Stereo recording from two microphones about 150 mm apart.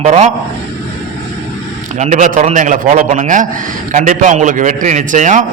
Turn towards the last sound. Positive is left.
turn(degrees=-55)  # may be behind; listen again after turning